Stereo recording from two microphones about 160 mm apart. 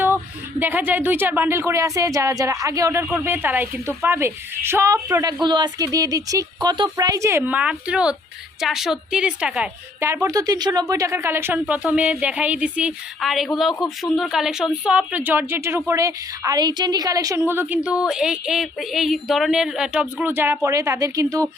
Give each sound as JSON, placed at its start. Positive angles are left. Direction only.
{"t": 0.6, "sound": "speech", "side_deg": -10}